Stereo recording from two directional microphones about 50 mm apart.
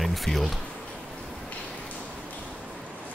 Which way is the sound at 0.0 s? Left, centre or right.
Centre.